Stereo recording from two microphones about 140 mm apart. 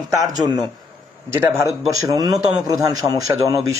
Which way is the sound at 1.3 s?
20° right (ahead or behind).